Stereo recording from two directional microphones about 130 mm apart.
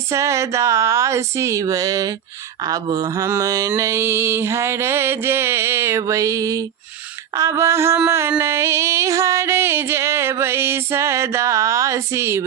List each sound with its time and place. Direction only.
0.1 s music: 20° right (ahead or behind)